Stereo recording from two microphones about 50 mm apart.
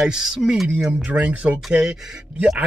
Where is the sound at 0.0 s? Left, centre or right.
Centre.